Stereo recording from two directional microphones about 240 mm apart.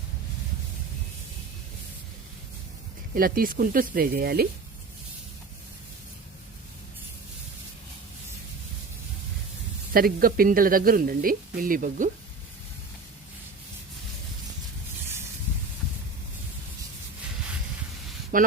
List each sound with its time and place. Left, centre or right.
3.2 s speech: right
9.9 s speech: right
18.3 s speech: right